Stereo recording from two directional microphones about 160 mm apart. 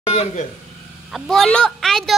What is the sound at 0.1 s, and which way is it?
Speech, 40° left (ahead or behind).